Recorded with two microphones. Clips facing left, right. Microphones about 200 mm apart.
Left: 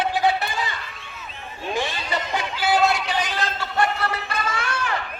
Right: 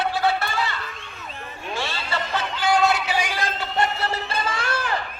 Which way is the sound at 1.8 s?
15° left (ahead or behind).